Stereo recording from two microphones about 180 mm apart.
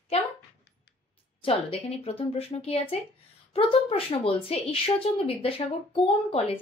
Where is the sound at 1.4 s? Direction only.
30° left (ahead or behind).